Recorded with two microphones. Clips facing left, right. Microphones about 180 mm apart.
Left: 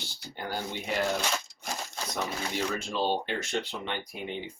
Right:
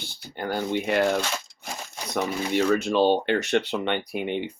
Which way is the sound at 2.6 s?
65° right (ahead or behind).